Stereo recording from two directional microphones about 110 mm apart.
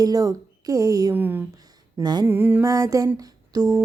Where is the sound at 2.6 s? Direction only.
30° right (ahead or behind).